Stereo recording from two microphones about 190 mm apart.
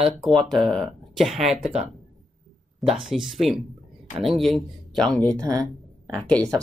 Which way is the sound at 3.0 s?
Centre (ahead or behind).